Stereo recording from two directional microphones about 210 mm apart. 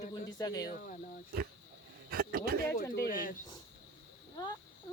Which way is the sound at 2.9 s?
45° left (ahead or behind).